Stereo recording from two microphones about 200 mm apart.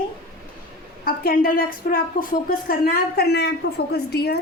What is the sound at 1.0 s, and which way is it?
A woman's voice, 45° left (ahead or behind).